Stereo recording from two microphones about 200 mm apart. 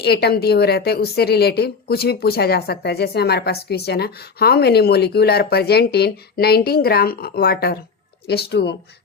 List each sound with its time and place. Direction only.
0.0 s a woman's voice: 55° left (ahead or behind)